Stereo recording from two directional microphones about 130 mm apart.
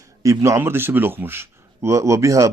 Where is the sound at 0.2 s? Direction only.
25° right (ahead or behind).